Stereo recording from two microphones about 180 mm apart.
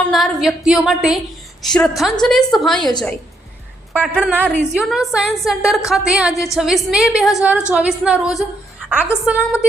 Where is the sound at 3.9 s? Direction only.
5° right (ahead or behind).